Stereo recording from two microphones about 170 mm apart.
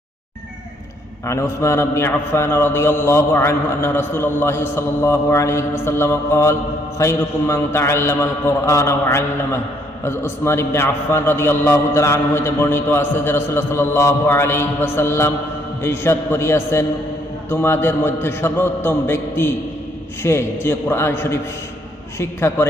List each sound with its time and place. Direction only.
1.3 s a man's voice: 15° left (ahead or behind)